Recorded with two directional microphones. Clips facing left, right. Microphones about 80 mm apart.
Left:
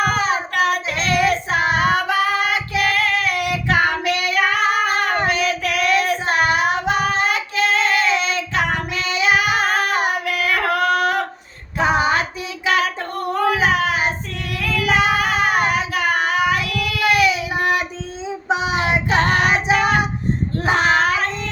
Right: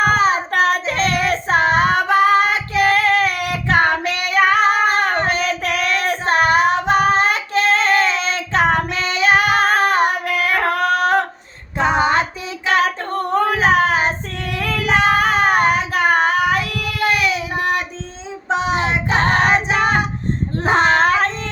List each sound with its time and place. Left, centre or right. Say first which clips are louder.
0.0 s child singing: right 4 dB; right
11.8 s female singing: right 1 dB; centre
12.6 s child singing: right 2 dB; right
17.2 s child singing: left 2 dB; centre
19.0 s child singing: right 3 dB; right
20.6 s child singing: right 3 dB; right